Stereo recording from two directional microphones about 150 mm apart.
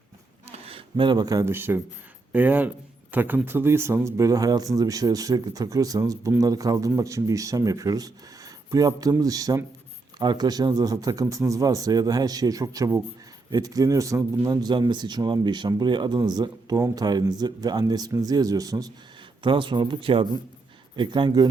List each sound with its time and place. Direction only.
0.4 s speech: 45° right (ahead or behind)